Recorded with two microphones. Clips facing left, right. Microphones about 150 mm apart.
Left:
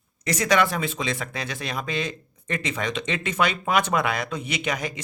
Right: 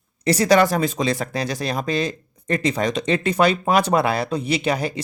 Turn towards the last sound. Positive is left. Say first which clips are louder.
# right 7 dB
turn(degrees=-35)  # may be behind; listen again after turning